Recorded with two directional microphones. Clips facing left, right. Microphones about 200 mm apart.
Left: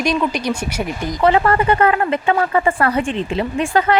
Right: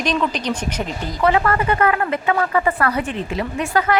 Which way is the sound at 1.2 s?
30° left (ahead or behind).